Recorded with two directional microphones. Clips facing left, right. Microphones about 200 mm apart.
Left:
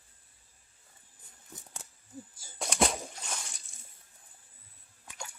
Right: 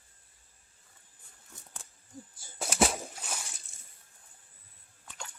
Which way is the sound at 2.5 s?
5° right (ahead or behind).